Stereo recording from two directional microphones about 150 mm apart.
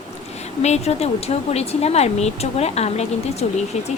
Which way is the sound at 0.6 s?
45° left (ahead or behind).